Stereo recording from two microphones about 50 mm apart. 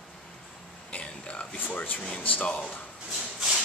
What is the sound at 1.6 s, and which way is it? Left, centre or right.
Speech, left.